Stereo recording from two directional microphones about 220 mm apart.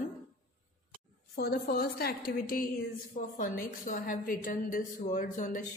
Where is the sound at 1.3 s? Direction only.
45° left (ahead or behind).